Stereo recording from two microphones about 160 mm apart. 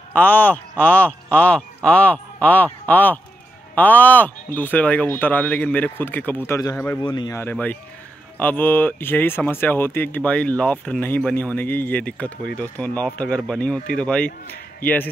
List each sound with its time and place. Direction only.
0.1 s speech: 10° left (ahead or behind); by 7.3 s 25° left (ahead or behind)
7.3 s speech: 10° left (ahead or behind)